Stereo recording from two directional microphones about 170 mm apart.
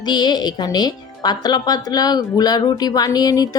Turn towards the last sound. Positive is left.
turn(degrees=20)  # may be behind; listen again after turning